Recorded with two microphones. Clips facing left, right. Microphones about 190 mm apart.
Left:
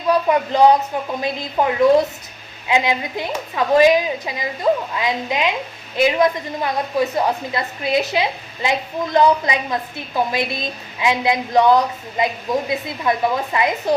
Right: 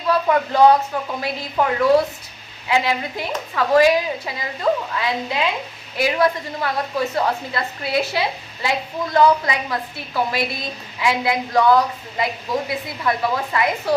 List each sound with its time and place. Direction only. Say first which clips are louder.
0.1 s a woman's voice: left 2 dB; 15° left (ahead or behind)